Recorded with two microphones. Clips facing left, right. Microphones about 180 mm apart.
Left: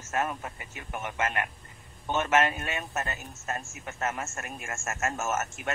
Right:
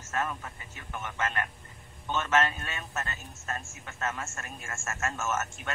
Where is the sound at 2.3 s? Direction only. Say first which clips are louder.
Left 2 dB; 20° left (ahead or behind).